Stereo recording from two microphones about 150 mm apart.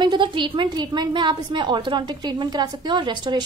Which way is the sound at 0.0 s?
30° right (ahead or behind).